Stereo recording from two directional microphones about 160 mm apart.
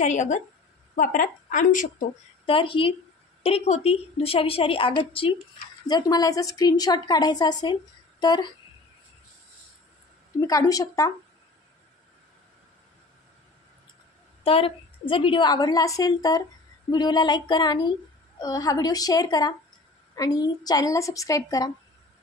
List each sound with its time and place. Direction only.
0.0 s a woman's voice: 50° left (ahead or behind)
2.4 s a woman's voice: 35° left (ahead or behind)
10.4 s a woman's voice: 20° left (ahead or behind)
14.4 s a woman's voice: 35° left (ahead or behind)